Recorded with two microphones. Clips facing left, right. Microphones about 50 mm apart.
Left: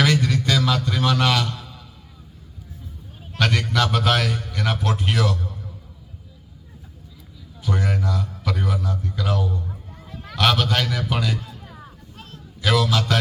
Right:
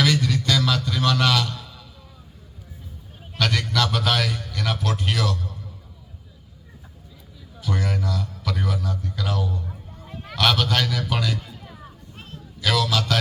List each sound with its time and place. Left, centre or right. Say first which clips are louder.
0.0 s music: left 2 dB; left
3.3 s a man's voice: left 2 dB; left
7.6 s a man's voice: left 2 dB; centre
10.1 s a sound: right 1 dB; centre
10.3 s a man's voice: left 1 dB; centre
12.6 s a man's voice: left 2 dB; left